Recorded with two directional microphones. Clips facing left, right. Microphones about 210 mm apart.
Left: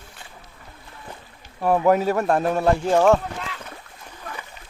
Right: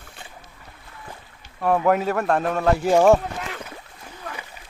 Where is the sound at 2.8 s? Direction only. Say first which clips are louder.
Right 3 dB; 10° right (ahead or behind).